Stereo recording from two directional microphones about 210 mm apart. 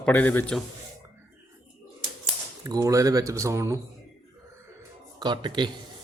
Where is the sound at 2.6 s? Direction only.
15° right (ahead or behind).